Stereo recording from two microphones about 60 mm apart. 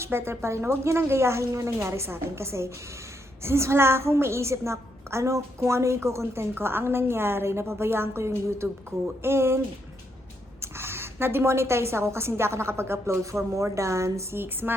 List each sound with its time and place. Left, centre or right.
0.0 s a woman's voice: right
10.6 s a woman's voice: right